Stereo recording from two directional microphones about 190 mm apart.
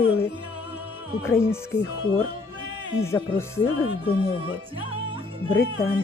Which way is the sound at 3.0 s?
15° left (ahead or behind).